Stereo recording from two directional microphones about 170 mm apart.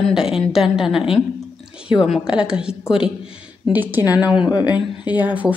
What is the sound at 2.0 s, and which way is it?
Speech, 5° right (ahead or behind).